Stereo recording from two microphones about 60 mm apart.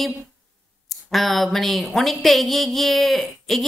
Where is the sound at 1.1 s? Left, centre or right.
Centre.